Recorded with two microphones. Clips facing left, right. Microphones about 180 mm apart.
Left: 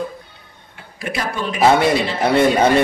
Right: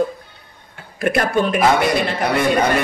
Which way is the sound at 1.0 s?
55° right (ahead or behind).